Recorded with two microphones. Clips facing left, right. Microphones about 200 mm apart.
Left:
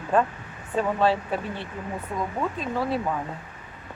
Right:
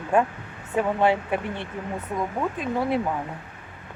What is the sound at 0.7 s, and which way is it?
Speech, 15° right (ahead or behind).